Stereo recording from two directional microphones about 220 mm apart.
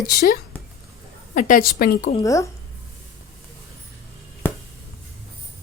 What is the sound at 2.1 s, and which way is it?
Speech, 15° left (ahead or behind).